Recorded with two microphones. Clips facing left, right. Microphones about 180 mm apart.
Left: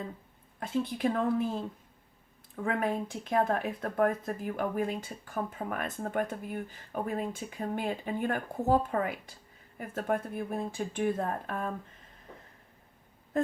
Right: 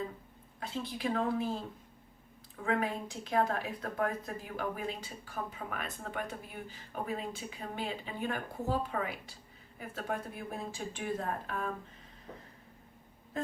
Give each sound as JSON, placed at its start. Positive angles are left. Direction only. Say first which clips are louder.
{"t": 0.6, "sound": "speech", "louder": "left 7 dB", "side_deg": 50}
{"t": 2.6, "sound": "speech", "louder": "left 2 dB", "side_deg": 55}